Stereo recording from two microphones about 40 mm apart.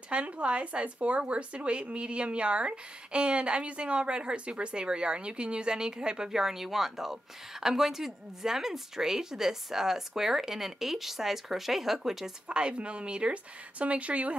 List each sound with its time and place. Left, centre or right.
0.1 s a woman's voice: right; by 12.3 s centre
12.4 s speech: right